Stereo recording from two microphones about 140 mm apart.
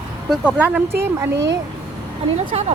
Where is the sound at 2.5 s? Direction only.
50° right (ahead or behind).